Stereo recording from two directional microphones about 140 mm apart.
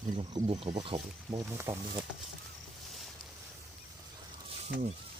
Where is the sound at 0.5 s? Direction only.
55° right (ahead or behind).